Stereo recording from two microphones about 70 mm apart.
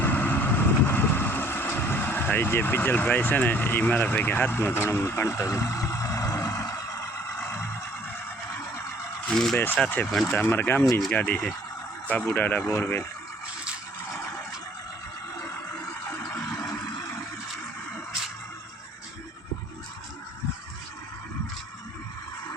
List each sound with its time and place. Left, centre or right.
0.0 s vehicle: left
9.3 s speech: centre
9.8 s speech: left
11.1 s speech: left
16.1 s a sound: left
16.4 s vehicle: left